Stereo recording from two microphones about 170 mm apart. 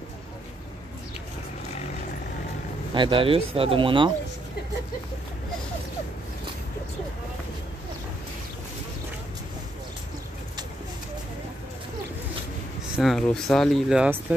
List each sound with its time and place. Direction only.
2.9 s speech: 30° right (ahead or behind)
12.9 s speech: centre (ahead or behind)